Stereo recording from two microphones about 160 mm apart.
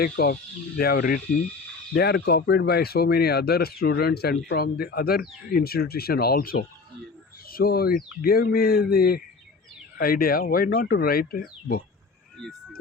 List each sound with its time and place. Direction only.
0.0 s speech: 70° left (ahead or behind)
2.0 s speech: 90° left; by 11.8 s 65° left (ahead or behind)